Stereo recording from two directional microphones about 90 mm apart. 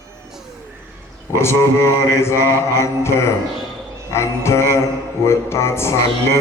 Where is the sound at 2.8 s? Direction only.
30° left (ahead or behind).